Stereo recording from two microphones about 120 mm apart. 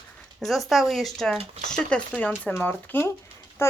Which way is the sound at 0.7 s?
Centre (ahead or behind).